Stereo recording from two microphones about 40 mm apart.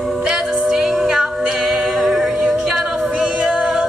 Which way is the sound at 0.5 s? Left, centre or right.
Centre.